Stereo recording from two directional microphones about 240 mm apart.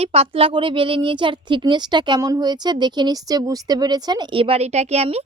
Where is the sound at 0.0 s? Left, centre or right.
Right.